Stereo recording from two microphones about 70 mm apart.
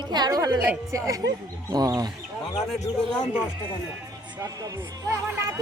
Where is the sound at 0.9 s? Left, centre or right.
Right.